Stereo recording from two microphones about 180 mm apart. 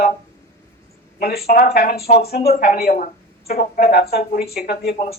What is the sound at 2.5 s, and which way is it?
Speech, 55° left (ahead or behind).